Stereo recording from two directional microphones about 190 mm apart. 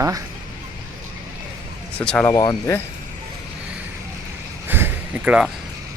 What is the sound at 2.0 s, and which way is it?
Speech, 5° left (ahead or behind).